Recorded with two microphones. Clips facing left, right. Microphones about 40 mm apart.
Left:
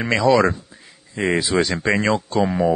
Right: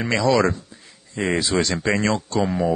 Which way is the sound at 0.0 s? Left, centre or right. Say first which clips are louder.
Left 3 dB; centre.